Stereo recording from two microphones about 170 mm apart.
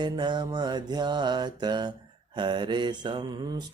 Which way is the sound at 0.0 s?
25° right (ahead or behind).